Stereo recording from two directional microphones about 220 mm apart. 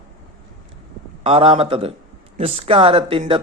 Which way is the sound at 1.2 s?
25° right (ahead or behind).